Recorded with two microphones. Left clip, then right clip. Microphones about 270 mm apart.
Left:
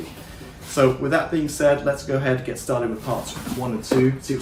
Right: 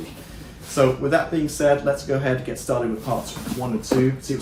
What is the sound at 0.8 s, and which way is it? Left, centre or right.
Speech, centre.